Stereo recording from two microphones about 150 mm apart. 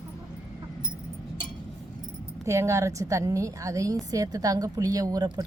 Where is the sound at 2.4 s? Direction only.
20° right (ahead or behind).